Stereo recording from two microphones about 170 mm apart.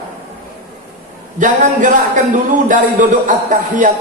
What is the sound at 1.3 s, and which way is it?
A man's voice, 50° right (ahead or behind).